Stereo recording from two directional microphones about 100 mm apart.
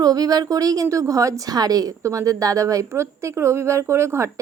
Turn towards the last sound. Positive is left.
turn(degrees=-30)  # may be behind; listen again after turning